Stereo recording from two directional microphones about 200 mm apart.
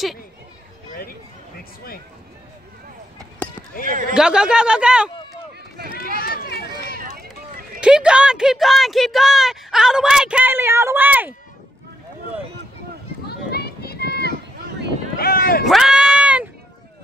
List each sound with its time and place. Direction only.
3.4 s a sound: 10° left (ahead or behind)
3.8 s a man's voice: 40° right (ahead or behind)
4.1 s speech: 5° right (ahead or behind)
6.1 s run: 50° left (ahead or behind)
7.1 s run: 50° right (ahead or behind)
7.8 s speech: 5° right (ahead or behind)
13.3 s run: 50° left (ahead or behind)
15.1 s a sound: 50° left (ahead or behind)
15.6 s a sound: centre (ahead or behind)